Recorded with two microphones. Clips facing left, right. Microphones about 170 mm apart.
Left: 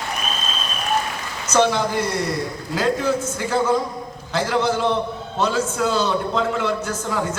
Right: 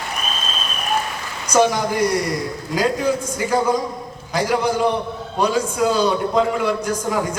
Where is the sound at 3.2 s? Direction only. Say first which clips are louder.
Right 1 dB; 15° right (ahead or behind).